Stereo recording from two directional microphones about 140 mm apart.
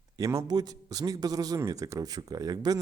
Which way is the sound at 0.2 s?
20° right (ahead or behind).